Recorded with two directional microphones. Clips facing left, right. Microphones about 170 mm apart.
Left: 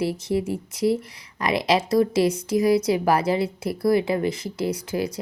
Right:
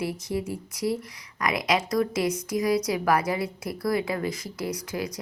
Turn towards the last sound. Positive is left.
turn(degrees=25)  # may be behind; listen again after turning